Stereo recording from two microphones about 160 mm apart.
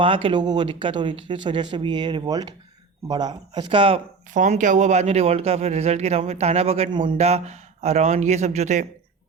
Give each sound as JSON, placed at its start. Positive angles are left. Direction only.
{"t": 0.0, "sound": "speech", "side_deg": -35}
{"t": 4.4, "sound": "a man's voice", "side_deg": -50}